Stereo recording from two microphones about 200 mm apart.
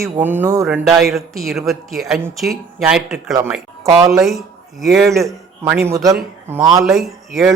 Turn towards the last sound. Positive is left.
turn(degrees=0)  # may be behind; listen again after turning